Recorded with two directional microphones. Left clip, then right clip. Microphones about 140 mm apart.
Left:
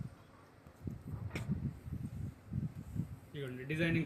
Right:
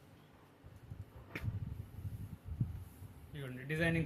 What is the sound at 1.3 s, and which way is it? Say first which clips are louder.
Vehicle: even; 5° left (ahead or behind).